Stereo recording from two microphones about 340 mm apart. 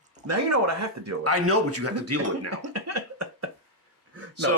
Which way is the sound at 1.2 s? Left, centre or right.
Right.